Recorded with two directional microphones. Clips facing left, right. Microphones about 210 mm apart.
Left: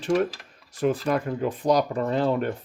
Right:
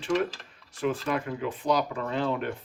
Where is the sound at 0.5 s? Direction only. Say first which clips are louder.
Left 5 dB; 40° left (ahead or behind).